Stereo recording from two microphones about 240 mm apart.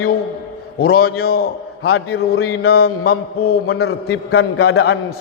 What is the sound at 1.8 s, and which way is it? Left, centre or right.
A man's voice, left.